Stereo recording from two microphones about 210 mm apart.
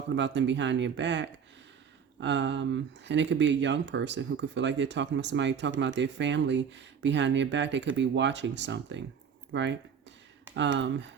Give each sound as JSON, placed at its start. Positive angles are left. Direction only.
{"t": 0.2, "sound": "speech", "side_deg": -55}